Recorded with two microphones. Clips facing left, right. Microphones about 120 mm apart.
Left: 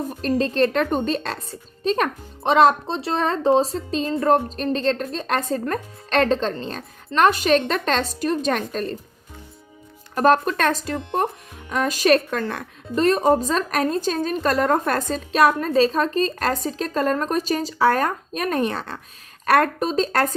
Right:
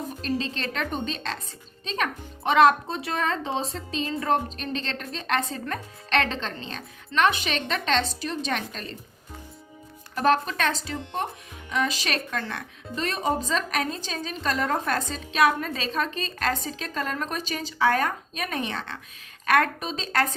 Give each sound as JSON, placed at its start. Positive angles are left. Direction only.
{"t": 0.2, "sound": "speech", "side_deg": 45}
{"t": 2.4, "sound": "speech", "side_deg": 30}
{"t": 10.2, "sound": "speech", "side_deg": 45}